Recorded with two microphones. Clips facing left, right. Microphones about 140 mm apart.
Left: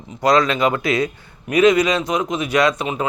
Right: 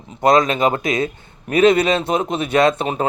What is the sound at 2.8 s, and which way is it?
Speech, 40° right (ahead or behind).